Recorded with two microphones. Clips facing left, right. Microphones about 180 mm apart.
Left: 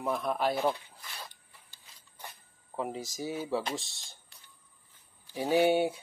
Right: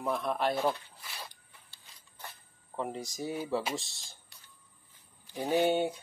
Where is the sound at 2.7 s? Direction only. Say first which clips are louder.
Left 1 dB; 5° left (ahead or behind).